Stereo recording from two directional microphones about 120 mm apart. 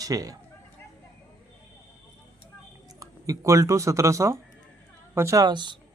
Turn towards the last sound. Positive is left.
turn(degrees=-40)  # may be behind; listen again after turning